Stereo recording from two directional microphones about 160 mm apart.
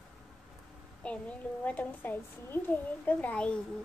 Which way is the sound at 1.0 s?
10° left (ahead or behind).